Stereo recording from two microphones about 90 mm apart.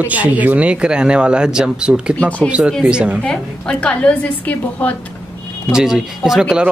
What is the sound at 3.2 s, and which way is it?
A woman's voice, 10° left (ahead or behind).